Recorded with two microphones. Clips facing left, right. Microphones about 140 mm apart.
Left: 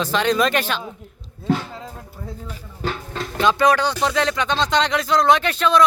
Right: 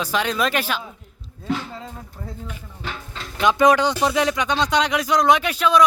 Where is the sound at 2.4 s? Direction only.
40° left (ahead or behind).